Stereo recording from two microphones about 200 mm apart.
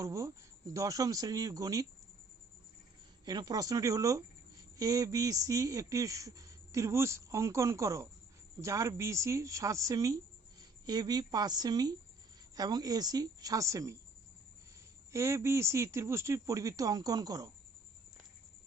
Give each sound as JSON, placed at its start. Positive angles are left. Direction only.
{"t": 0.0, "sound": "speech", "side_deg": -15}
{"t": 3.2, "sound": "a woman's voice", "side_deg": -20}
{"t": 15.1, "sound": "speech", "side_deg": -15}